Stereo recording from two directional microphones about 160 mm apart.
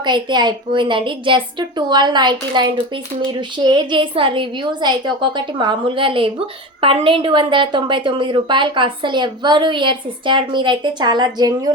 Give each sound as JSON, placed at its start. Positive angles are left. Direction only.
{"t": 0.0, "sound": "a woman's voice", "side_deg": -30}